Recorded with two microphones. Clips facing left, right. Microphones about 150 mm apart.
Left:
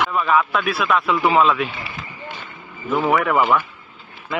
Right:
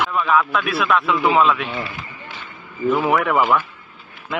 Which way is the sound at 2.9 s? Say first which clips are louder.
Even; centre (ahead or behind).